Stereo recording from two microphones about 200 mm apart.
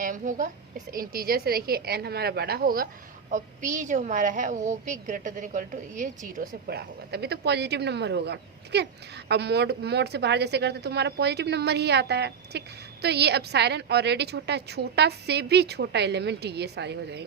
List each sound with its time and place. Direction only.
0.0 s a woman's voice: 40° right (ahead or behind); by 17.2 s 55° right (ahead or behind)